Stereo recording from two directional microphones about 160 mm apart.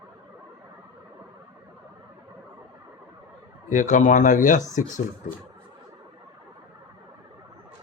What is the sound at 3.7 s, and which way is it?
Speech, 50° left (ahead or behind).